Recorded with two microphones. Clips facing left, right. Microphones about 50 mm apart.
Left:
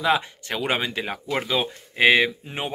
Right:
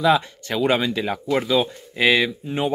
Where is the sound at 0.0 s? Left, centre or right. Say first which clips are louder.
Right 4 dB; left.